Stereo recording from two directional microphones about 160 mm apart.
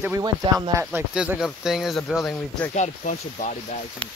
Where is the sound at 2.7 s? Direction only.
50° left (ahead or behind).